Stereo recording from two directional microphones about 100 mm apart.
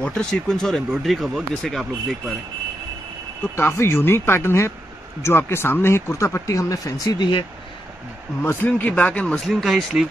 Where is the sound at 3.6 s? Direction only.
25° left (ahead or behind).